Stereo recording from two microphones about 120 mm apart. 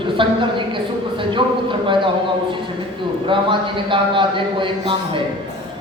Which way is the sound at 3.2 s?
45° right (ahead or behind).